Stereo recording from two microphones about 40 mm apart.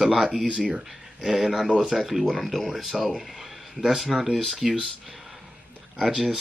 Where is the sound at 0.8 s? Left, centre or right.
Centre.